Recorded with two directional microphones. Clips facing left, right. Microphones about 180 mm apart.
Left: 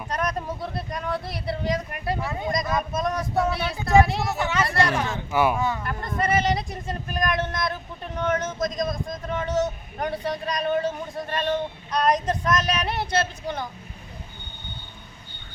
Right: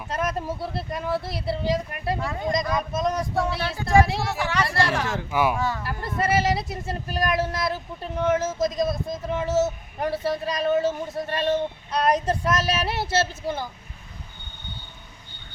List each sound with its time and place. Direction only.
0.1 s speech: 5° right (ahead or behind)
7.1 s speech: 30° right (ahead or behind)
7.6 s speech: 5° right (ahead or behind)